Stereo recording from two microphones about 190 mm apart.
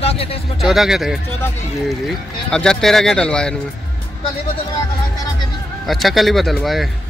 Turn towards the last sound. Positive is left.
turn(degrees=0)  # may be behind; listen again after turning